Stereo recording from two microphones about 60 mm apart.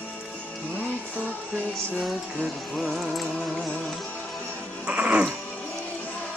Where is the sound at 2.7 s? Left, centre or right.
Centre.